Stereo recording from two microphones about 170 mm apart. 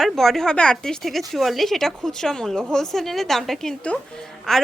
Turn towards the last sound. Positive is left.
turn(degrees=0)  # may be behind; listen again after turning